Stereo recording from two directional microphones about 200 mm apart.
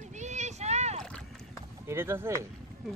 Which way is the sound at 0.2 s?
35° right (ahead or behind).